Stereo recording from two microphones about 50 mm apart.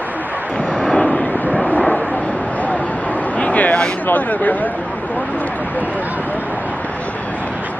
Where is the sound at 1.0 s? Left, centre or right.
Left.